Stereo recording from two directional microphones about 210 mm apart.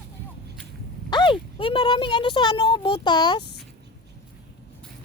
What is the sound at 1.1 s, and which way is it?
Speech, 25° left (ahead or behind).